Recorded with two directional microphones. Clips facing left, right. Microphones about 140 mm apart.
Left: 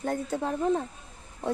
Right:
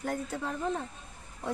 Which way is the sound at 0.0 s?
30° left (ahead or behind).